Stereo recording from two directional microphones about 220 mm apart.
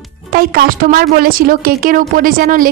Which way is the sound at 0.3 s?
45° right (ahead or behind).